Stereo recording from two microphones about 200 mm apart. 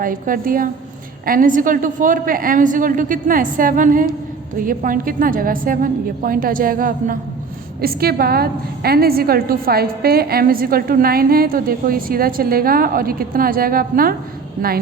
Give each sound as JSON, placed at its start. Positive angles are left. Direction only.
{"t": 0.0, "sound": "a woman's voice", "side_deg": -45}